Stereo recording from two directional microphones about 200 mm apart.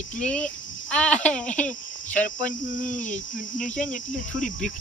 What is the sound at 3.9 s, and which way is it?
Cricket, 40° left (ahead or behind).